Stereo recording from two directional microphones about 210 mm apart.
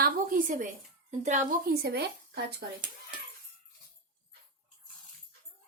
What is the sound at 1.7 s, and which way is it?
Speech, 50° right (ahead or behind).